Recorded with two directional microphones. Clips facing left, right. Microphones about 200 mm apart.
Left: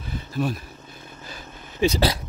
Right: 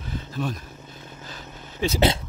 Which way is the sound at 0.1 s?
10° left (ahead or behind).